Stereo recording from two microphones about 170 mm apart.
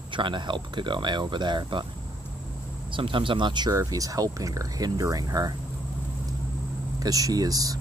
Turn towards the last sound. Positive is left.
turn(degrees=-20)  # may be behind; listen again after turning